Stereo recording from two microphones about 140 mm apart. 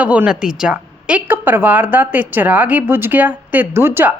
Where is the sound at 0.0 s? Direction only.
10° right (ahead or behind).